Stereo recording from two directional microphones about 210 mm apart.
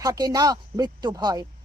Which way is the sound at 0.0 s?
15° right (ahead or behind).